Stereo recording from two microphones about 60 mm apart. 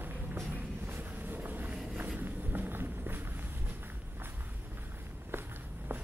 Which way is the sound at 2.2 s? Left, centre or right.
Right.